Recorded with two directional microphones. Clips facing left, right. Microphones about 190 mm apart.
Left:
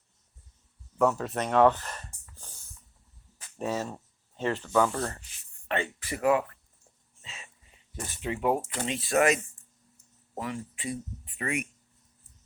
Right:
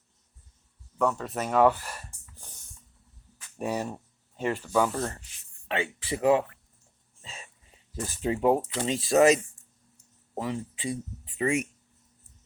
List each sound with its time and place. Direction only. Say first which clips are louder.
0.9 s speech: left 2 dB; 5° left (ahead or behind)
2.4 s a sound: even; 20° right (ahead or behind)
3.6 s speech: right 1 dB; 15° right (ahead or behind)
6.1 s speech: right 2 dB; 25° right (ahead or behind)
7.2 s a sound: right 3 dB; 35° right (ahead or behind)
7.9 s speech: right 5 dB; 35° right (ahead or behind)